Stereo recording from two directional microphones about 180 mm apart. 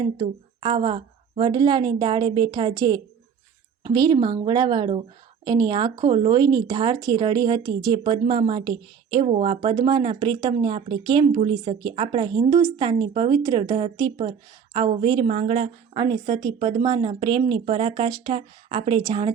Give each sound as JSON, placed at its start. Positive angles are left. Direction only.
{"t": 0.0, "sound": "speech", "side_deg": -25}
{"t": 15.3, "sound": "speech", "side_deg": -40}
{"t": 16.0, "sound": "speech", "side_deg": -25}